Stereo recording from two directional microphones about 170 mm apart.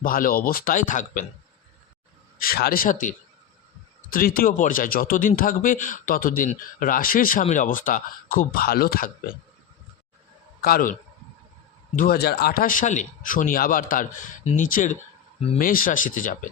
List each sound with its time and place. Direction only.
0.0 s speech: 55° left (ahead or behind)
2.4 s speech: 60° left (ahead or behind)
10.6 s a man's voice: 60° left (ahead or behind)
11.9 s speech: 65° left (ahead or behind)